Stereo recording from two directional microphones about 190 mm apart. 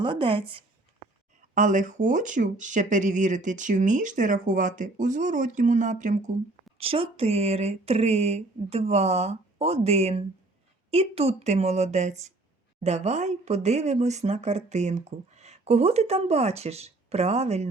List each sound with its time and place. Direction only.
0.0 s speech: 25° right (ahead or behind)
1.5 s speech: 40° right (ahead or behind)
6.7 s speech: 30° right (ahead or behind)